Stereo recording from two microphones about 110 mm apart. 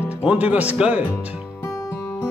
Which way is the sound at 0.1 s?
10° right (ahead or behind).